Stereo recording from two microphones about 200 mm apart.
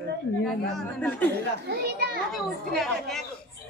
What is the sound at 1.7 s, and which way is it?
Speech, 50° right (ahead or behind).